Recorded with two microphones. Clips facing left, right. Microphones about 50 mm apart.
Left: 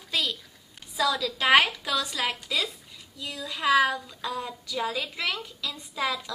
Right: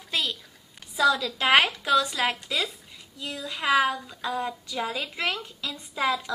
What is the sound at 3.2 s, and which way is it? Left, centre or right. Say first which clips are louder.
Speech: right 1 dB; right.